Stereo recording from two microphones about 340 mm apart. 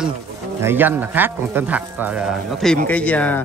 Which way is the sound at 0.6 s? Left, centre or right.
Centre.